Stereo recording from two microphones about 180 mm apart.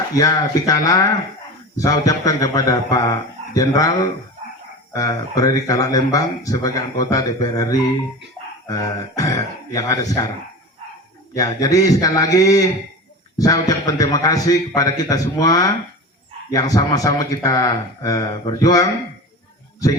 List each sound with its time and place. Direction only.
0.1 s speech: 20° left (ahead or behind)
11.3 s speech: 20° left (ahead or behind)